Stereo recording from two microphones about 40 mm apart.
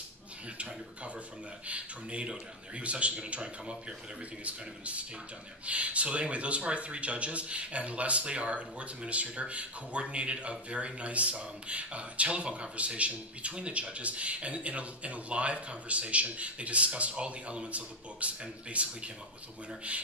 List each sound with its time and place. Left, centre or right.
0.6 s speech: right